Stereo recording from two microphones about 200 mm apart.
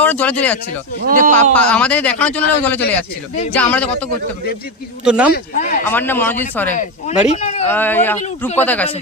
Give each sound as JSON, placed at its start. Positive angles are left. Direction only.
{"t": 0.0, "sound": "speech", "side_deg": 10}
{"t": 1.0, "sound": "speech", "side_deg": -40}
{"t": 1.5, "sound": "speech", "side_deg": 5}
{"t": 5.0, "sound": "speech", "side_deg": -5}
{"t": 5.5, "sound": "speech", "side_deg": 40}
{"t": 5.9, "sound": "speech", "side_deg": 10}
{"t": 6.7, "sound": "speech", "side_deg": 35}
{"t": 7.7, "sound": "speech", "side_deg": 10}